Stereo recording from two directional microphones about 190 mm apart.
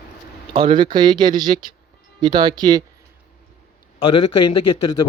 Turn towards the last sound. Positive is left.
turn(degrees=25)  # may be behind; listen again after turning